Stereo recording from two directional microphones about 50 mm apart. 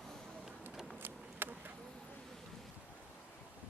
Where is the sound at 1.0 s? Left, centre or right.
Right.